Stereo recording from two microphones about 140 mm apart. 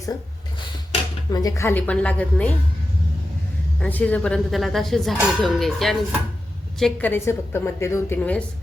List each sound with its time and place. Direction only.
1.3 s a woman's voice: 25° left (ahead or behind); by 2.6 s 10° left (ahead or behind)
3.8 s speech: 10° left (ahead or behind)
7.1 s a woman's voice: 20° left (ahead or behind)